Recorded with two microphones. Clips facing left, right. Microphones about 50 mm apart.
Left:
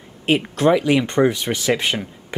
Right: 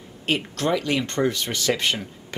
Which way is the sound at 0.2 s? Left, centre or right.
Centre.